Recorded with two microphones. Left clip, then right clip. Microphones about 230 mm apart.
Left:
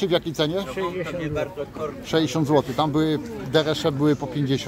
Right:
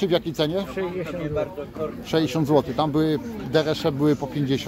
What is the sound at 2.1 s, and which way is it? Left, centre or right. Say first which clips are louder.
A man's voice: even; centre.